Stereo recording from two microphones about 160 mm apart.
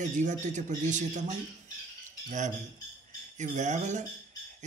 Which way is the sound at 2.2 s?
50° right (ahead or behind).